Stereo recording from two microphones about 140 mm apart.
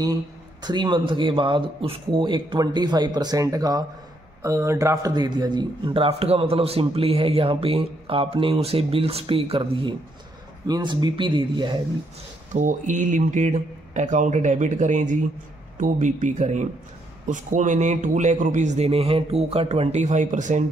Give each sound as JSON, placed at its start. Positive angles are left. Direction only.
{"t": 0.0, "sound": "a man's voice", "side_deg": -30}
{"t": 12.5, "sound": "speech", "side_deg": -65}